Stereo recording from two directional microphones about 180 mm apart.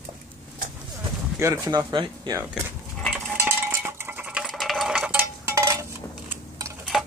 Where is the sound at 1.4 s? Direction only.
20° right (ahead or behind).